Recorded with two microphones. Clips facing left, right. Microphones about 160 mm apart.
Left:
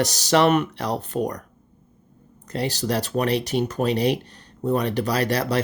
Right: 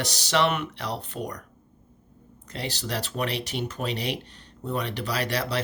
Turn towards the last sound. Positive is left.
turn(degrees=45)  # may be behind; listen again after turning